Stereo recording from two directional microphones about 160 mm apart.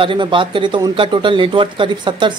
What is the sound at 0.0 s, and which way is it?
Speech, 30° right (ahead or behind).